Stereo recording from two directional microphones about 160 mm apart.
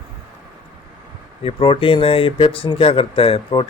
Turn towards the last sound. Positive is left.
turn(degrees=30)  # may be behind; listen again after turning